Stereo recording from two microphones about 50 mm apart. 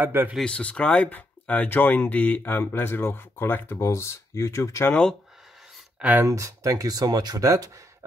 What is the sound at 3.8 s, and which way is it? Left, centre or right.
Speech, left.